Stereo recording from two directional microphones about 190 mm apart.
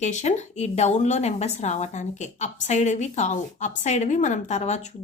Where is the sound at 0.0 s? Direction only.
40° left (ahead or behind).